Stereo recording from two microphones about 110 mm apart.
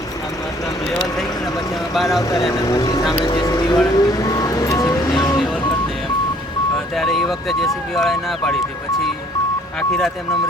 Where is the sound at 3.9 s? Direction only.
35° left (ahead or behind).